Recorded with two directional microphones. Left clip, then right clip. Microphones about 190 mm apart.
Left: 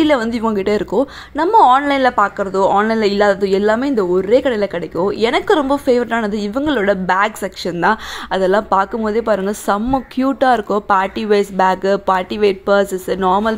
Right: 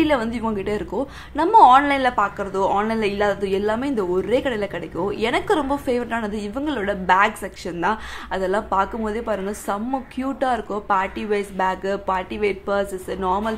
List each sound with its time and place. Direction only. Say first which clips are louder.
0.0 s a woman's voice: left 6 dB; 30° left (ahead or behind)